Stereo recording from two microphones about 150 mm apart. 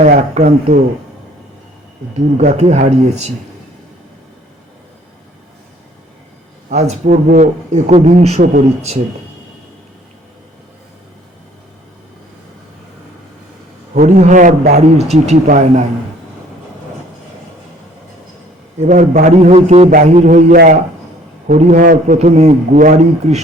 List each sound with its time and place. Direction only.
0.3 s a man's voice: 50° right (ahead or behind)
2.4 s a man's voice: 50° right (ahead or behind)
6.7 s a man's voice: 45° right (ahead or behind)
13.9 s a man's voice: 50° right (ahead or behind)
18.8 s a man's voice: 55° right (ahead or behind)
19.4 s a man's voice: 45° right (ahead or behind)
19.9 s a man's voice: 65° right (ahead or behind)